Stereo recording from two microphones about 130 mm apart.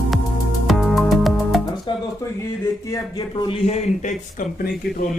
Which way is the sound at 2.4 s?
25° left (ahead or behind).